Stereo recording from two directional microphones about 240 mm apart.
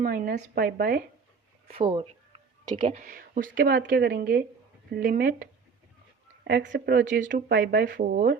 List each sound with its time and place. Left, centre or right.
0.0 s speech: right
1.7 s speech: right
2.9 s speech: right
6.5 s speech: right